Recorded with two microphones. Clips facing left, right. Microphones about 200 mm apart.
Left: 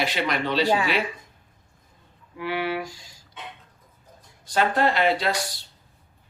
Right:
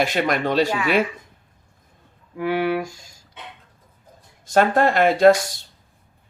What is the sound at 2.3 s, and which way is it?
Speech, 45° right (ahead or behind).